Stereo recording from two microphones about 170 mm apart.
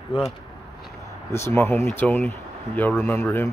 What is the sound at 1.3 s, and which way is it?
A man's voice, 15° left (ahead or behind).